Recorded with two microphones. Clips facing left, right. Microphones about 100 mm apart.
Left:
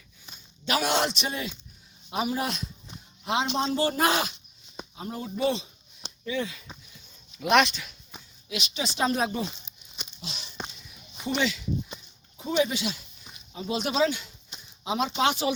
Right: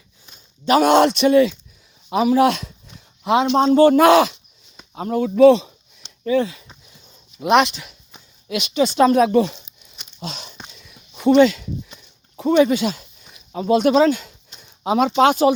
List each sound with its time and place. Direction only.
0.6 s speech: 50° right (ahead or behind); by 2.7 s 90° right
3.2 s speech: 75° right (ahead or behind); by 4.4 s 90° right
4.9 s speech: 80° right
6.2 s speech: 40° right (ahead or behind)
6.9 s a sound: 30° right (ahead or behind)
8.4 s speech: 55° right (ahead or behind); by 9.6 s 85° right
10.2 s a sound: 50° right (ahead or behind)
11.3 s speech: 50° right (ahead or behind)
12.4 s speech: 65° right (ahead or behind)
14.8 s speech: 70° right (ahead or behind)
15.2 s speech: 50° right (ahead or behind)